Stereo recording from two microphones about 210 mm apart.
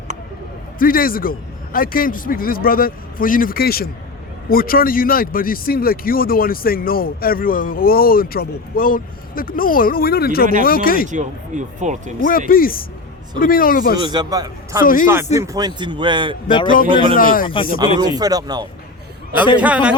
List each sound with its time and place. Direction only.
0.8 s speech: 45° left (ahead or behind)
11.1 s speech: 35° right (ahead or behind)
12.5 s speech: 45° left (ahead or behind)
14.0 s a man's voice: 20° right (ahead or behind)
16.5 s a man's voice: 20° left (ahead or behind)
16.9 s a man's voice: 25° right (ahead or behind)
17.2 s speech: 40° left (ahead or behind)
17.4 s a man's voice: 25° left (ahead or behind)
18.1 s a man's voice: 15° right (ahead or behind)
19.5 s speech: 5° right (ahead or behind)